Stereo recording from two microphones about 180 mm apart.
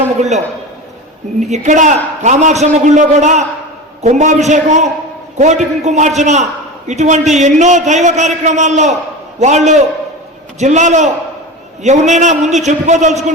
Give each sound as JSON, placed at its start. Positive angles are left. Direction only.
{"t": 0.2, "sound": "a man's voice", "side_deg": -40}